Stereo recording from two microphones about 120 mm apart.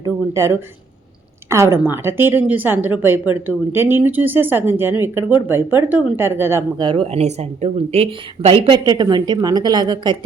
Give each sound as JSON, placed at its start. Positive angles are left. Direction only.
{"t": 0.0, "sound": "a woman's voice", "side_deg": -25}
{"t": 6.7, "sound": "speech", "side_deg": -45}
{"t": 8.6, "sound": "a woman's voice", "side_deg": -35}